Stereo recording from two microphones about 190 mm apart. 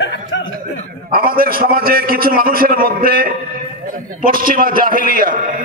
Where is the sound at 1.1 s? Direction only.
50° right (ahead or behind).